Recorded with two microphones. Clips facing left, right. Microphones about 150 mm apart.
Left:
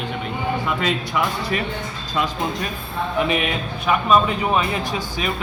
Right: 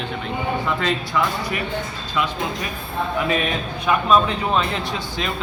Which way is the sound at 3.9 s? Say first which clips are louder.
Even; 5° left (ahead or behind).